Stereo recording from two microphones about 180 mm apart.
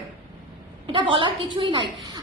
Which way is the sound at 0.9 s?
30° right (ahead or behind).